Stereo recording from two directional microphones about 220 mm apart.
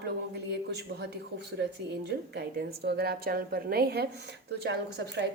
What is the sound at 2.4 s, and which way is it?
Speech, 50° right (ahead or behind).